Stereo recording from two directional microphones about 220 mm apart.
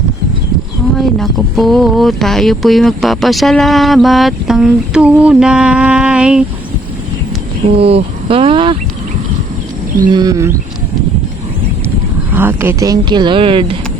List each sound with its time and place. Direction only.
0.9 s speech: centre (ahead or behind)
7.8 s speech: 25° right (ahead or behind)
10.1 s a sound: 15° right (ahead or behind)
12.3 s speech: 10° right (ahead or behind)